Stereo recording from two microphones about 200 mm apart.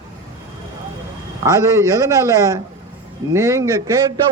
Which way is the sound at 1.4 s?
15° right (ahead or behind).